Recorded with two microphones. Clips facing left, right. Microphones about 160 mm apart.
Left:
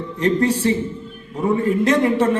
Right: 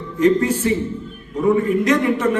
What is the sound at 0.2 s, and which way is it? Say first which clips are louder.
A man's voice: right 2 dB; 30° left (ahead or behind).